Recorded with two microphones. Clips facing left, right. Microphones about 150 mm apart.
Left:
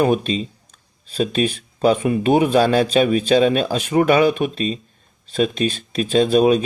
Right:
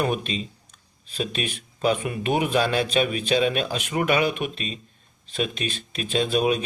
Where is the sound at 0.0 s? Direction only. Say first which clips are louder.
Left 8 dB; 35° left (ahead or behind).